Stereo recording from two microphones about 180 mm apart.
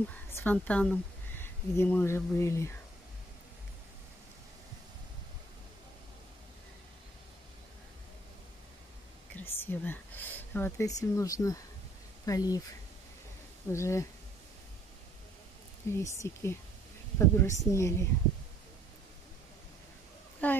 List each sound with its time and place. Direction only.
0.3 s speech: 10° left (ahead or behind)
9.3 s speech: 10° left (ahead or behind)
13.7 s speech: 15° left (ahead or behind)
15.8 s speech: 15° left (ahead or behind)
20.4 s a sound: 10° left (ahead or behind)